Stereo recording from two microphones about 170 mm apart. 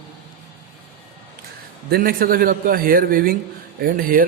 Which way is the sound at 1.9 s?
55° right (ahead or behind).